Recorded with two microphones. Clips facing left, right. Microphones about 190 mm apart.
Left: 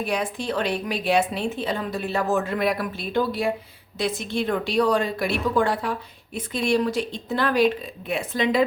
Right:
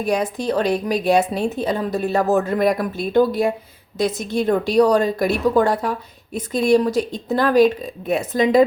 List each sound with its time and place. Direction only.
0.0 s a woman's voice: 40° right (ahead or behind)